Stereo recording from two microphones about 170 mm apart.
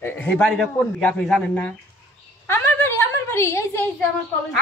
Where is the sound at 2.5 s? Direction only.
15° left (ahead or behind).